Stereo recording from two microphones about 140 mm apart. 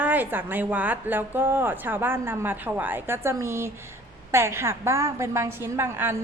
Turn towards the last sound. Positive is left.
turn(degrees=-15)  # may be behind; listen again after turning